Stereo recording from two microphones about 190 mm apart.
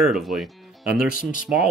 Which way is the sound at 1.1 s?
45° left (ahead or behind).